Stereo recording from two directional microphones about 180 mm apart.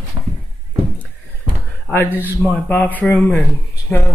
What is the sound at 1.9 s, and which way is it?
Speech, 10° left (ahead or behind).